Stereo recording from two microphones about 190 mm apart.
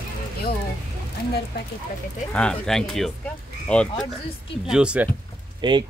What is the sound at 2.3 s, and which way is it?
Speech, 5° left (ahead or behind).